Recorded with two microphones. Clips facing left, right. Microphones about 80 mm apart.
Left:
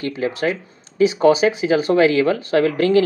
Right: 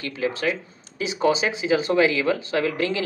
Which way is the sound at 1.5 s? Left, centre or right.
Right.